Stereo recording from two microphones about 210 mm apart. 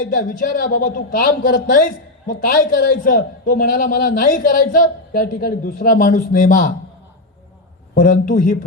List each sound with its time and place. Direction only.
0.1 s a man's voice: 40° left (ahead or behind)
7.9 s a man's voice: 40° left (ahead or behind)